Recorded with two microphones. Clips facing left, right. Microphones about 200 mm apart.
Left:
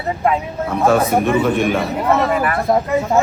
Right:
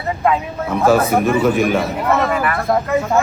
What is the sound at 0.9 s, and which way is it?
Speech, centre (ahead or behind).